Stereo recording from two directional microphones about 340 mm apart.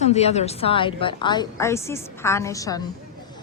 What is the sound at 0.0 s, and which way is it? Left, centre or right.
A woman's voice, centre.